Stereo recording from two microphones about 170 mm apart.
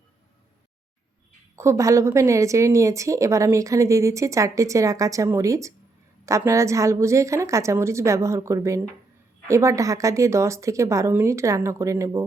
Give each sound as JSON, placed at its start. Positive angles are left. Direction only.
{"t": 1.5, "sound": "a woman's voice", "side_deg": -15}